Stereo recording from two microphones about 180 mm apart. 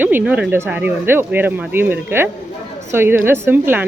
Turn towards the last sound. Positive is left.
turn(degrees=-10)  # may be behind; listen again after turning